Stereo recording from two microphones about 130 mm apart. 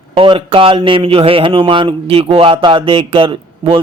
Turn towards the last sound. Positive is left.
turn(degrees=-40)  # may be behind; listen again after turning